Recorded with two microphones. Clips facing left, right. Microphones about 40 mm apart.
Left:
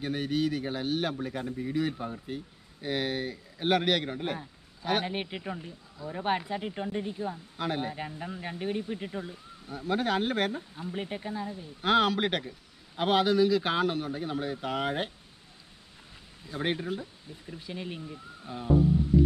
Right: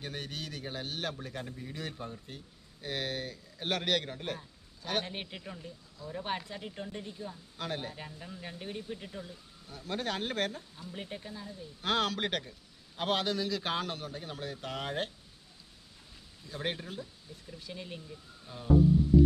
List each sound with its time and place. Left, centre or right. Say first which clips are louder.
0.0 s speech: left 11 dB; centre
7.5 s speech: left 5 dB; centre
10.8 s speech: left 6 dB; left
11.8 s speech: left 6 dB; centre
16.4 s speech: left 6 dB; centre